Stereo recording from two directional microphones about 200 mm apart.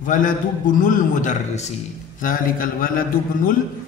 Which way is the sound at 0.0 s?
40° left (ahead or behind).